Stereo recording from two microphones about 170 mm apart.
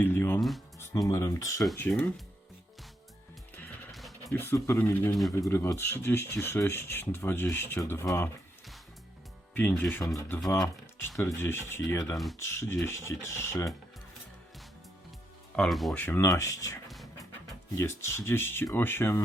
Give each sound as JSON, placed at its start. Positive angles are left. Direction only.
{"t": 0.0, "sound": "speech", "side_deg": 10}
{"t": 4.3, "sound": "speech", "side_deg": 15}
{"t": 9.6, "sound": "speech", "side_deg": 10}
{"t": 12.1, "sound": "speech", "side_deg": 0}
{"t": 12.4, "sound": "speech", "side_deg": 15}
{"t": 15.5, "sound": "speech", "side_deg": 0}
{"t": 17.7, "sound": "speech", "side_deg": 15}